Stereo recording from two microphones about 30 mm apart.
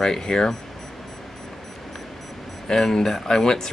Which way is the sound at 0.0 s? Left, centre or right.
Left.